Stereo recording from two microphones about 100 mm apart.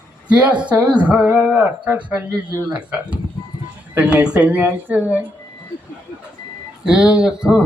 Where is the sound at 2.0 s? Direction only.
15° right (ahead or behind).